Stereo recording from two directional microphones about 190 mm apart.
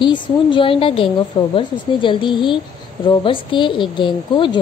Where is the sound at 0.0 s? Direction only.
25° left (ahead or behind).